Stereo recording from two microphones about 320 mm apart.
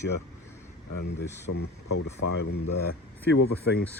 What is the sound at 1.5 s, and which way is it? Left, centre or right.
Speech, left.